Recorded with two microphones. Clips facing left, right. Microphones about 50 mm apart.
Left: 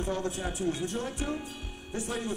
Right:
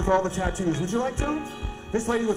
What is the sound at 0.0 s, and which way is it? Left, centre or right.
Speech, right.